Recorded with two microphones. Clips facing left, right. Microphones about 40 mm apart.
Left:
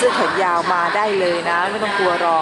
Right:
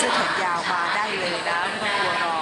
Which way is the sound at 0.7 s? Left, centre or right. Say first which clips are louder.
Left 6 dB; centre.